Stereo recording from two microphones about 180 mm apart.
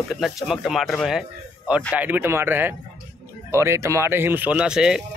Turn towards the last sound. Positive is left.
turn(degrees=-5)  # may be behind; listen again after turning